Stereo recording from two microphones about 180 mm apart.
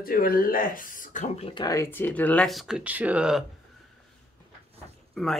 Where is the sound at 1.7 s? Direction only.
15° left (ahead or behind); by 3.4 s 5° right (ahead or behind).